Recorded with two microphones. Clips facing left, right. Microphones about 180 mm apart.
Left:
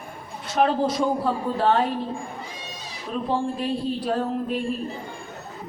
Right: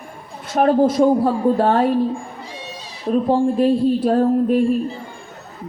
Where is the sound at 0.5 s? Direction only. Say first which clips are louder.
Right 7 dB; 45° right (ahead or behind).